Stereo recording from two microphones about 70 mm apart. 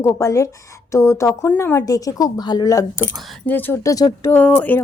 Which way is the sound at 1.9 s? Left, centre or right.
Left.